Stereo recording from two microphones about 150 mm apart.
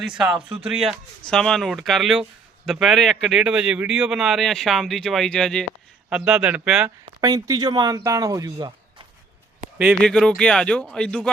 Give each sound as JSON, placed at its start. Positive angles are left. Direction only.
{"t": 0.2, "sound": "a man's voice", "side_deg": -5}
{"t": 7.2, "sound": "speech", "side_deg": -25}
{"t": 10.0, "sound": "a man's voice", "side_deg": 5}